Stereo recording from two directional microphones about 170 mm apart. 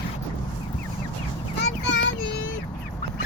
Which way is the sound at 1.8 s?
90° left.